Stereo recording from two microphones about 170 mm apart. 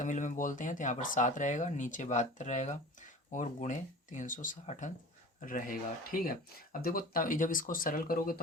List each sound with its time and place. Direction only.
0.0 s speech: 45° left (ahead or behind)